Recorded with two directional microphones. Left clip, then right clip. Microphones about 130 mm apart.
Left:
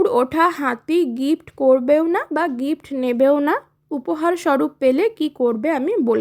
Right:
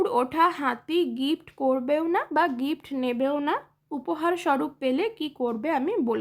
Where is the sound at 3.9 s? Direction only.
35° left (ahead or behind).